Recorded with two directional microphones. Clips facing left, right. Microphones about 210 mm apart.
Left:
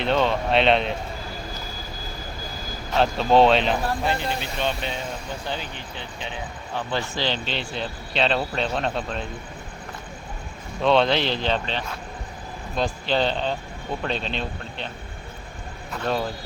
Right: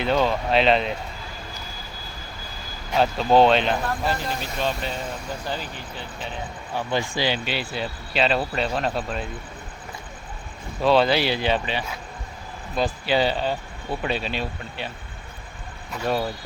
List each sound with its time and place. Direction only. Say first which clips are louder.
0.0 s speech: even; 5° right (ahead or behind)
2.9 s speech: even; 5° right (ahead or behind)
10.8 s speech: right 1 dB; 5° right (ahead or behind)
15.9 s speech: right 1 dB; 5° right (ahead or behind)